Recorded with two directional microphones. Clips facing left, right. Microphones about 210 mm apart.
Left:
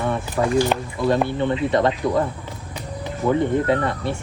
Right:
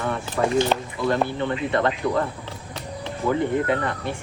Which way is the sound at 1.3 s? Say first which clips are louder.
Left 4 dB; 20° left (ahead or behind).